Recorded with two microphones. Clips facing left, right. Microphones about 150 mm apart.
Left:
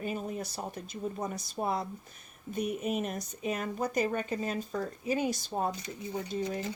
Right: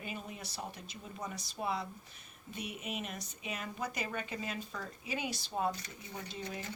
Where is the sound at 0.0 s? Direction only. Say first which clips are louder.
Left 9 dB; 40° left (ahead or behind).